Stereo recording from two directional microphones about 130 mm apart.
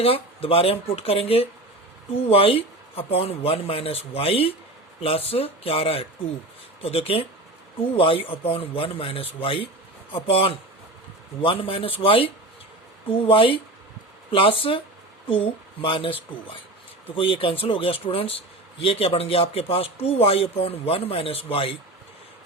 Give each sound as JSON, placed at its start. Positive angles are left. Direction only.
{"t": 0.0, "sound": "speech", "side_deg": 45}